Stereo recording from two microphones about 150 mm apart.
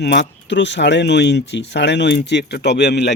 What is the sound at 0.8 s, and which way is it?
Speech, 90° left.